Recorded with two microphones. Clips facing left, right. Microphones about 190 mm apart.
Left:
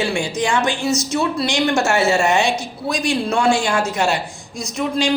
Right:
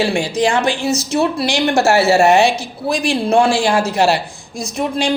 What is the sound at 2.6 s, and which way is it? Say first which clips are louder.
A woman's voice: right 3 dB; 30° right (ahead or behind).